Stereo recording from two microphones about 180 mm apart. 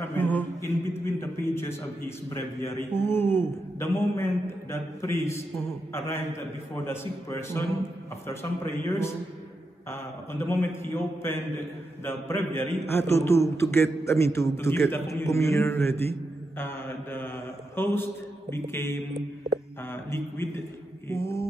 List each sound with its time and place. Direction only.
0.0 s a sound: 10° left (ahead or behind)
3.1 s a man's voice: 10° left (ahead or behind)
21.1 s mantra: 15° left (ahead or behind)